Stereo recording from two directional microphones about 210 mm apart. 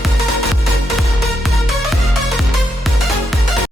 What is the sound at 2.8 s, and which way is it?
Music, centre (ahead or behind).